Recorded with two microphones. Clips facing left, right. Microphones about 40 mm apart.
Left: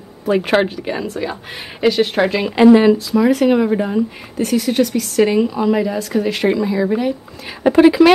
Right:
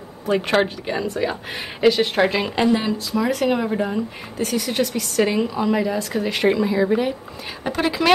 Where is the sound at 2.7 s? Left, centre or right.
Left.